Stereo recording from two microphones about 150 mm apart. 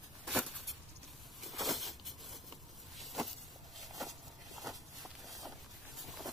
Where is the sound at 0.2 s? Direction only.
Centre (ahead or behind).